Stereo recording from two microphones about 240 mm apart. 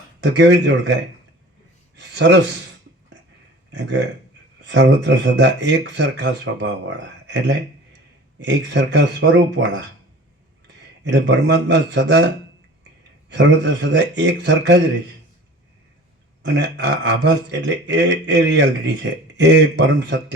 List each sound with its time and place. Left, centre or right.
0.2 s speech: right
2.0 s speech: right
3.7 s a man's voice: right
11.0 s speech: right
13.3 s speech: right
16.4 s speech: right